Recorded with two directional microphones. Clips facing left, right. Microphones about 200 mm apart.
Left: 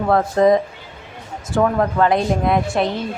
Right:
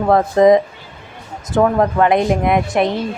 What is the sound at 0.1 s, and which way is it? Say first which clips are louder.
Speech: right 4 dB; 20° right (ahead or behind).